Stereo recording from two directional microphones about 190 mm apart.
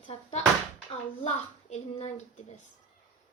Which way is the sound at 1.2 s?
35° left (ahead or behind).